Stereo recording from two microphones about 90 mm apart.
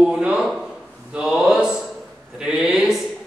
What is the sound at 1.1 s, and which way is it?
Mantra, 10° right (ahead or behind).